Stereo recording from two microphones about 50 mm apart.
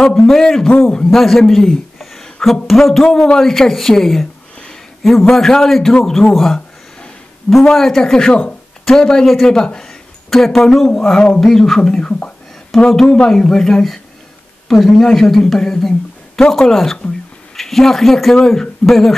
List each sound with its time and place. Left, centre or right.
0.3 s a man's voice: centre
5.3 s a man's voice: centre
9.2 s a man's voice: centre
9.5 s a man's voice: centre
11.0 s a sound: centre
11.4 s speech: centre
12.7 s a man's voice: centre